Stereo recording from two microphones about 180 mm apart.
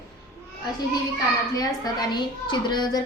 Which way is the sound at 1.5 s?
20° left (ahead or behind).